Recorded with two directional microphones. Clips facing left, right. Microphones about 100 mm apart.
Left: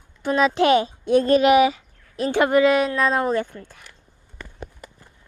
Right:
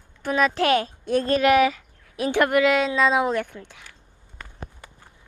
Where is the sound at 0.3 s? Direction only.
Centre (ahead or behind).